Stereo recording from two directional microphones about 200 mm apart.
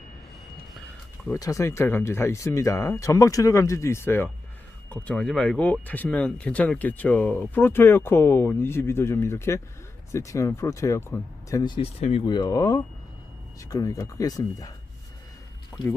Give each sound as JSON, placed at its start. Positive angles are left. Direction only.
{"t": 1.3, "sound": "speech", "side_deg": 15}
{"t": 15.7, "sound": "speech", "side_deg": 10}